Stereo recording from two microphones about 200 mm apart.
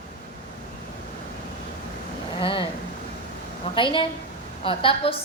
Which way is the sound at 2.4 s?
25° left (ahead or behind).